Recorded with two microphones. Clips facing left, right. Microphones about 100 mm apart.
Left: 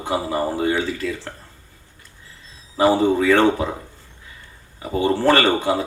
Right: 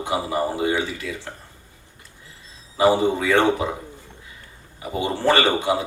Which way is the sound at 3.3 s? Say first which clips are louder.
Left 2 dB; 15° right (ahead or behind).